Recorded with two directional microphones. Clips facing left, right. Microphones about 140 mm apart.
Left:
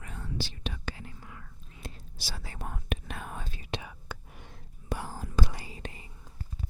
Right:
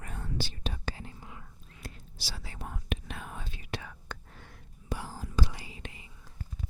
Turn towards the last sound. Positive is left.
turn(degrees=40)  # may be behind; listen again after turning